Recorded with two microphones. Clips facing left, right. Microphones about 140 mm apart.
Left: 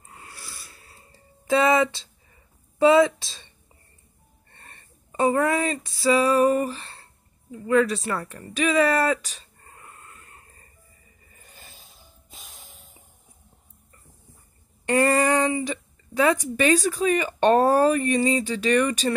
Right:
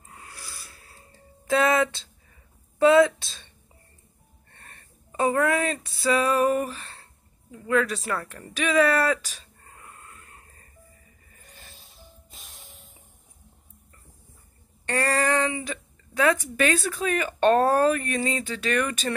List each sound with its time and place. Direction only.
0.1 s a sound: centre (ahead or behind)
2.8 s speech: centre (ahead or behind)
4.6 s speech: centre (ahead or behind)
11.3 s music: centre (ahead or behind)
14.9 s a sound: 15° left (ahead or behind)
15.6 s speech: centre (ahead or behind)